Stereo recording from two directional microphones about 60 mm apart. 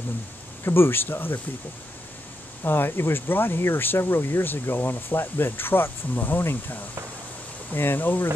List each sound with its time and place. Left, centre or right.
0.7 s speech: left
2.6 s speech: left